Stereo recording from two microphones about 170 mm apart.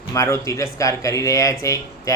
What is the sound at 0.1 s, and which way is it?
A man's voice, 20° left (ahead or behind).